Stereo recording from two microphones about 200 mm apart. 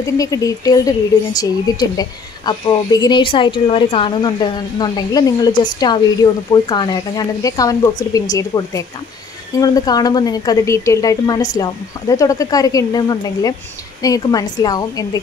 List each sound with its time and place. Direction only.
0.0 s speech: 15° left (ahead or behind)